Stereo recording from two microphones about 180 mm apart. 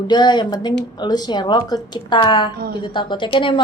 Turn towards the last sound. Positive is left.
turn(degrees=25)  # may be behind; listen again after turning